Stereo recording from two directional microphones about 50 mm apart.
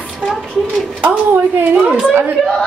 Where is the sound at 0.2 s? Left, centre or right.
Centre.